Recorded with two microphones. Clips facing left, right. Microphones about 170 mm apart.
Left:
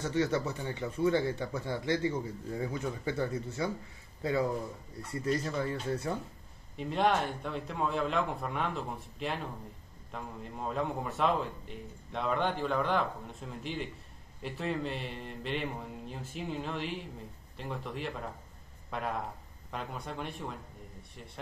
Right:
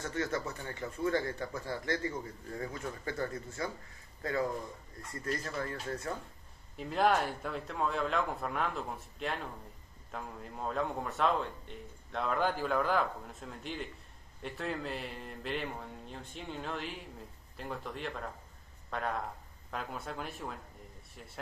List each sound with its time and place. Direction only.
0.7 s a man's voice: 25° left (ahead or behind)
1.0 s speech: 10° left (ahead or behind)
1.9 s a man's voice: 20° left (ahead or behind)
2.6 s speech: 10° left (ahead or behind)
6.8 s a man's voice: centre (ahead or behind)